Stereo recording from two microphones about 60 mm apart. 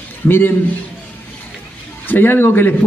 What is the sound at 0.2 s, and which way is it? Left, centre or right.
Speech, left.